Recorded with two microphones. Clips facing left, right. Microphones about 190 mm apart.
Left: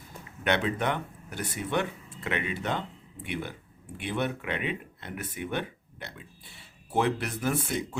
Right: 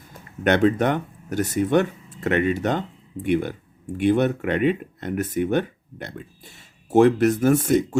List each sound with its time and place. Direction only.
0.4 s speech: 45° right (ahead or behind)